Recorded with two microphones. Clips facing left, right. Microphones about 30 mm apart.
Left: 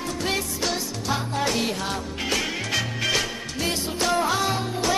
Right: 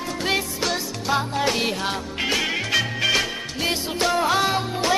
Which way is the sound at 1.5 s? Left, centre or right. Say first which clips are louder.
Right 2 dB; right.